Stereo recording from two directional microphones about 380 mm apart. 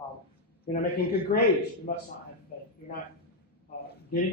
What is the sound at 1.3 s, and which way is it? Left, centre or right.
Speech, centre.